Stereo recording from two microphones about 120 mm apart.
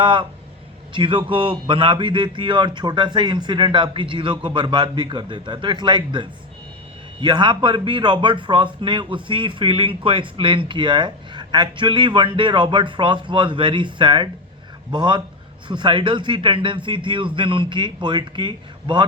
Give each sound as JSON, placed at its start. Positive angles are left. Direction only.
{"t": 0.0, "sound": "a man's voice", "side_deg": -40}